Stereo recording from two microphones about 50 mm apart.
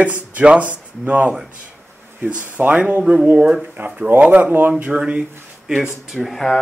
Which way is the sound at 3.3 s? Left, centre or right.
Right.